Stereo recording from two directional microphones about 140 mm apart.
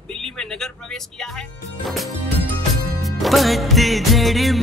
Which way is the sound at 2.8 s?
Centre (ahead or behind).